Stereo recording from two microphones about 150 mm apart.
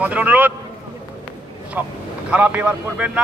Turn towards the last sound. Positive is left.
turn(degrees=-10)  # may be behind; listen again after turning